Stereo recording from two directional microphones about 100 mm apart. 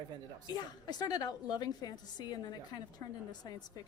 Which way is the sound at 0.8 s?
40° left (ahead or behind).